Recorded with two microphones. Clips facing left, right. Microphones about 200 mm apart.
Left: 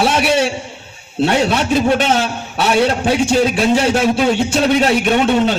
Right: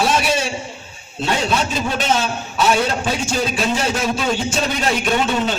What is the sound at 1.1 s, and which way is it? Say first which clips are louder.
A man's voice: left 5 dB; 65° left (ahead or behind).